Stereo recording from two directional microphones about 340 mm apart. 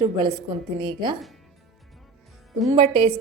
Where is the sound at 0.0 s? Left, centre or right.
Centre.